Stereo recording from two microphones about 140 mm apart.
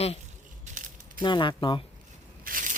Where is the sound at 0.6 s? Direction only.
65° right (ahead or behind).